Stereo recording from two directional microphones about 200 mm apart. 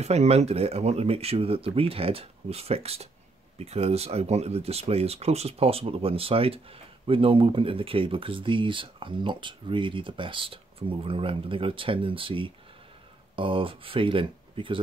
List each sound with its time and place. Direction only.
0.0 s speech: 35° right (ahead or behind)